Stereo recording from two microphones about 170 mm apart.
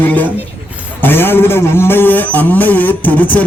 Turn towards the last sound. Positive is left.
turn(degrees=10)  # may be behind; listen again after turning